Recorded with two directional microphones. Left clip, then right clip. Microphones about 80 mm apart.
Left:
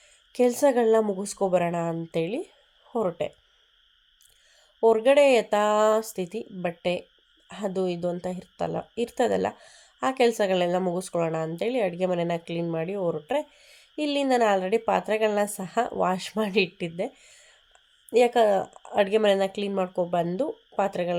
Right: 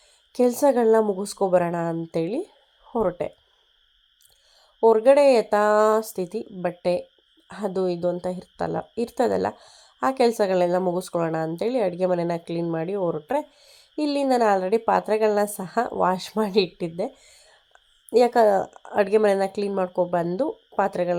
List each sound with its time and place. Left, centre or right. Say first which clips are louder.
0.3 s a woman's voice: right 2 dB; right
4.8 s a woman's voice: right 3 dB; right